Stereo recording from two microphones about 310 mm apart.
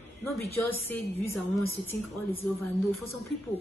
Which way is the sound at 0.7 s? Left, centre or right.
Centre.